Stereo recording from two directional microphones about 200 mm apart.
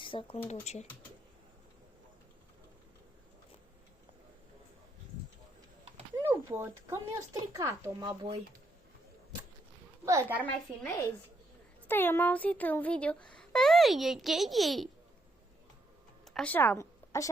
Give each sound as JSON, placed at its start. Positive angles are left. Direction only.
{"t": 0.0, "sound": "speech", "side_deg": 25}
{"t": 6.2, "sound": "speech", "side_deg": -10}
{"t": 10.1, "sound": "speech", "side_deg": -10}
{"t": 11.9, "sound": "speech", "side_deg": 10}
{"t": 16.2, "sound": "a sound", "side_deg": 5}